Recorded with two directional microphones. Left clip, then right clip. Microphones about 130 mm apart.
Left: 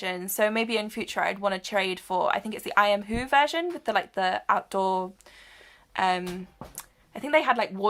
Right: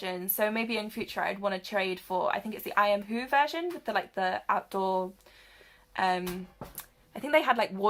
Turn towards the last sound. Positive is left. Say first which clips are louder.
# left 2 dB
turn(degrees=15)  # may be behind; listen again after turning